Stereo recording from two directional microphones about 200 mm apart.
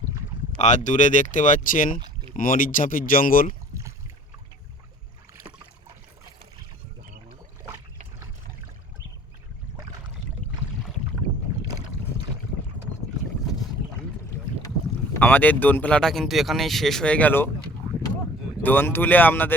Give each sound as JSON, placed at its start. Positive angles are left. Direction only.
{"t": 0.6, "sound": "speech", "side_deg": 35}
{"t": 2.0, "sound": "rowboat", "side_deg": -20}
{"t": 2.3, "sound": "speech", "side_deg": 45}
{"t": 15.2, "sound": "speech", "side_deg": 10}
{"t": 18.6, "sound": "speech", "side_deg": 10}